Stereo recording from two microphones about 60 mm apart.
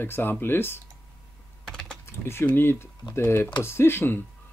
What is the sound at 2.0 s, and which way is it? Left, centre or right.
Speech, left.